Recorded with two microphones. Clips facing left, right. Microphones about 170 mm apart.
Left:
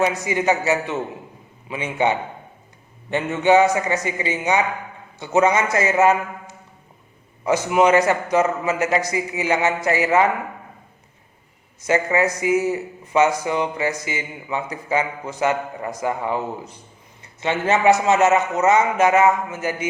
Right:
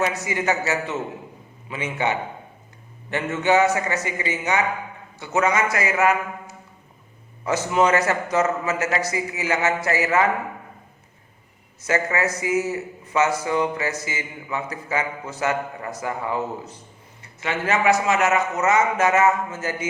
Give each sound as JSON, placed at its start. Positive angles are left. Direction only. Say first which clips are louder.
{"t": 0.0, "sound": "a man's voice", "louder": "left 4 dB", "side_deg": 20}
{"t": 7.4, "sound": "a man's voice", "louder": "left 3 dB", "side_deg": 15}
{"t": 11.9, "sound": "a man's voice", "louder": "left 4 dB", "side_deg": 15}